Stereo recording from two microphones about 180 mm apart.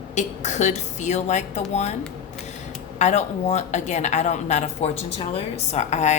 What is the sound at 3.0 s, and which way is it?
Speech, 40° left (ahead or behind).